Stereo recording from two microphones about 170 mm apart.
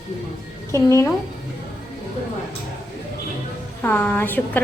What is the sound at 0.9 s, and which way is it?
Speech, 15° left (ahead or behind).